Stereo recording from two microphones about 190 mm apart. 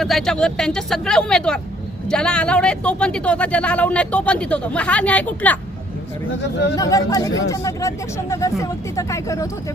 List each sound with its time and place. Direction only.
0.0 s speech: centre (ahead or behind)
6.7 s speech: 15° left (ahead or behind)